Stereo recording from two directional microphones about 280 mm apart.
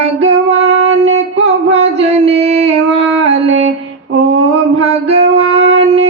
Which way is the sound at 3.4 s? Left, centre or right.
Right.